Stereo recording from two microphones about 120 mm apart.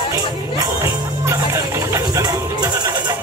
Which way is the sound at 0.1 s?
25° right (ahead or behind).